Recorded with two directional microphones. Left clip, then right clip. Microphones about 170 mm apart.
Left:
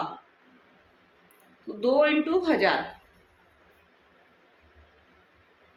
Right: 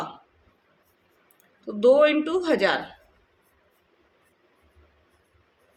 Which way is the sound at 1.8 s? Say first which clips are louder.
Right 5 dB; 45° right (ahead or behind).